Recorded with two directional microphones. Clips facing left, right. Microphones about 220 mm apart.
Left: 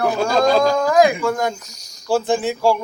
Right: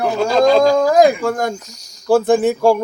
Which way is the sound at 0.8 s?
35° right (ahead or behind).